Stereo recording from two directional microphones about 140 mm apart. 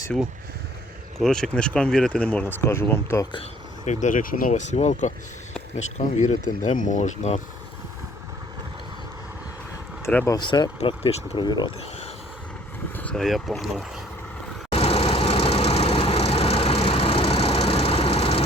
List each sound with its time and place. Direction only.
1.2 s speech: 5° left (ahead or behind)
3.8 s speech: 65° left (ahead or behind)
10.0 s speech: 10° left (ahead or behind)
10.2 s speech: 30° left (ahead or behind)
10.8 s speech: 45° left (ahead or behind)
11.4 s speech: 30° left (ahead or behind)
13.0 s speech: 5° left (ahead or behind)
14.7 s vehicle: 45° left (ahead or behind)